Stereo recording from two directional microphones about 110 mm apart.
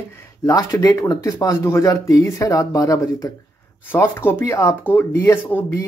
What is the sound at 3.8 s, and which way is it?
Speech, 20° left (ahead or behind).